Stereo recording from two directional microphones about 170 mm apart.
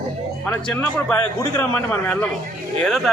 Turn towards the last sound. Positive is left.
turn(degrees=0)  # may be behind; listen again after turning